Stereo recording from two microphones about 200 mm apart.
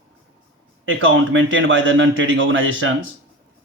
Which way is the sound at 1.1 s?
70° right (ahead or behind).